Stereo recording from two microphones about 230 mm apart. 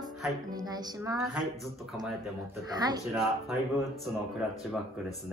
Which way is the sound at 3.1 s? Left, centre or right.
Centre.